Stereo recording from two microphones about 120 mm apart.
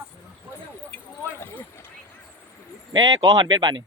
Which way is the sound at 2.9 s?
30° right (ahead or behind).